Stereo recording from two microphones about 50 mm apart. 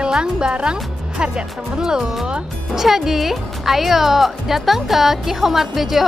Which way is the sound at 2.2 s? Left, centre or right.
Centre.